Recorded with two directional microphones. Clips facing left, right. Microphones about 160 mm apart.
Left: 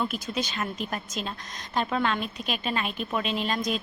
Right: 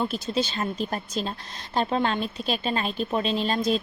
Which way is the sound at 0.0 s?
30° right (ahead or behind).